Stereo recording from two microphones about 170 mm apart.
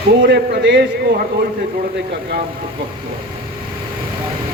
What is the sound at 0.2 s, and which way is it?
Speech, 65° right (ahead or behind).